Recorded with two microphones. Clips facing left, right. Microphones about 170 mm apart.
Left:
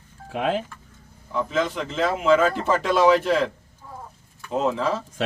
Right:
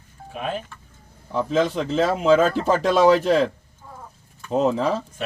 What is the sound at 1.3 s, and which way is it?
A man's voice, 35° right (ahead or behind).